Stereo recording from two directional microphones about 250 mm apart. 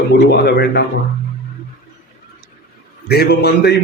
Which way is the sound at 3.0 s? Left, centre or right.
Left.